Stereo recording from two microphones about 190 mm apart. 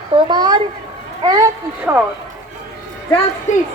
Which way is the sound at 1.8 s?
10° right (ahead or behind).